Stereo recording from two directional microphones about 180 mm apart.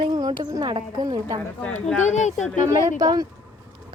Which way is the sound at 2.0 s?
40° left (ahead or behind).